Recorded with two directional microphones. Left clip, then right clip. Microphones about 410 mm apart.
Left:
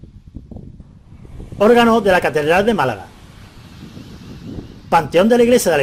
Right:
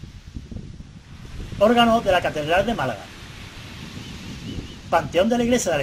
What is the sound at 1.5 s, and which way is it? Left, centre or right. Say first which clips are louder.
Speech: left 5 dB; left.